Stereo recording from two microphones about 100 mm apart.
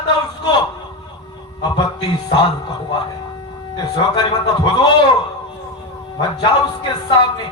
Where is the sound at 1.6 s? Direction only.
45° left (ahead or behind).